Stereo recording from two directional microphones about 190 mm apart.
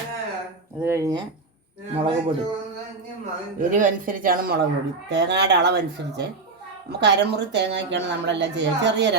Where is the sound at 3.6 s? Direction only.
45° right (ahead or behind).